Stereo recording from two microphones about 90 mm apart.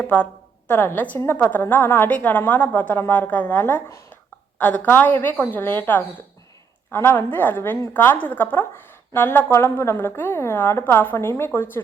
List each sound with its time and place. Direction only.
0.0 s a woman's voice: 15° left (ahead or behind)